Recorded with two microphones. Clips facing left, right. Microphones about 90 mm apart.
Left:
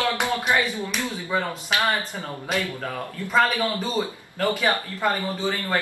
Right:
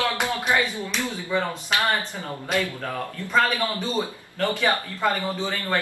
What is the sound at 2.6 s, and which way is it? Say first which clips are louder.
Speech: right 1 dB; 15° left (ahead or behind).